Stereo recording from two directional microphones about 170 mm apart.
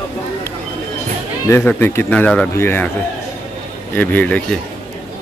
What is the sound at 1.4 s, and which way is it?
Speech, 15° left (ahead or behind).